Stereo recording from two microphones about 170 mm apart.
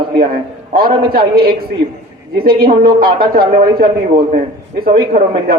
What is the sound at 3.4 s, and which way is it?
A man's voice, 55° right (ahead or behind).